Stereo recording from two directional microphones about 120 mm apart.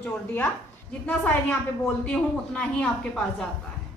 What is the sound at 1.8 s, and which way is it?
A woman's voice, 5° left (ahead or behind).